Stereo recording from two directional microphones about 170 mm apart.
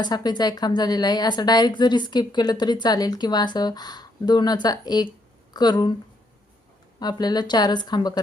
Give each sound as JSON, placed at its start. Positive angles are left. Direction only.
{"t": 0.0, "sound": "a woman's voice", "side_deg": 25}
{"t": 7.0, "sound": "a woman's voice", "side_deg": 25}